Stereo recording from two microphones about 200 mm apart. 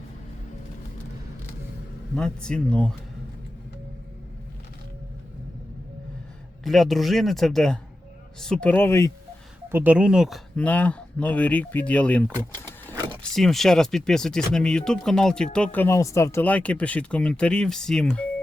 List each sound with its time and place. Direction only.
2.1 s speech: 5° left (ahead or behind)
6.7 s speech: centre (ahead or behind)
9.6 s speech: 10° right (ahead or behind); by 12.3 s 5° left (ahead or behind)
13.3 s speech: centre (ahead or behind)